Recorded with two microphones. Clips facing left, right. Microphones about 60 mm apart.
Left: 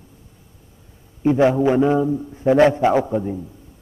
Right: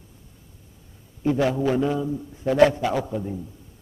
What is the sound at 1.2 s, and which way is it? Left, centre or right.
A man's voice, left.